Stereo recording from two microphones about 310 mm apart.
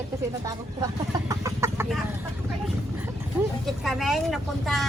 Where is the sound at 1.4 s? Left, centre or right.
Centre.